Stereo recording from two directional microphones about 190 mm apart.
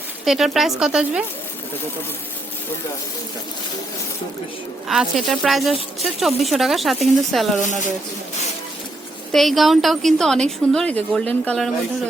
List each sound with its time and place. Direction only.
0.3 s speech: centre (ahead or behind)
4.9 s speech: centre (ahead or behind)
7.6 s speech: 40° left (ahead or behind)
9.3 s speech: centre (ahead or behind)